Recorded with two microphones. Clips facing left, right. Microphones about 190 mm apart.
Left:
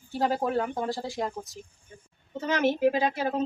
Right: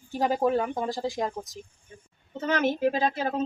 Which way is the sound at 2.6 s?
10° left (ahead or behind).